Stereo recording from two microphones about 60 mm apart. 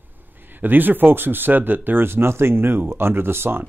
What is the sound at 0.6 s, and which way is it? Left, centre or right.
Speech, right.